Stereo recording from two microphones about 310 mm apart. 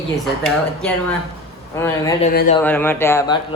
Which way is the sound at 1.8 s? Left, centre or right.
Centre.